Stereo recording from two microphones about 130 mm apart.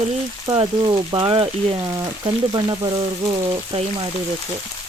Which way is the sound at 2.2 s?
35° right (ahead or behind).